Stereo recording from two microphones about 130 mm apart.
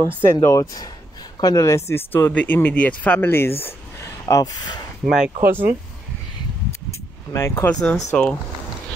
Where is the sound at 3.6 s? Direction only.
25° left (ahead or behind).